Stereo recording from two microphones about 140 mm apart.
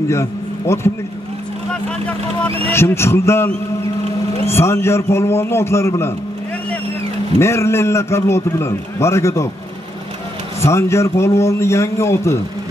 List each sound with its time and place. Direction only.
0.1 s a man's voice: 20° left (ahead or behind)
2.7 s a man's voice: 20° left (ahead or behind)
7.3 s a man's voice: 20° left (ahead or behind)
10.6 s a man's voice: 20° left (ahead or behind)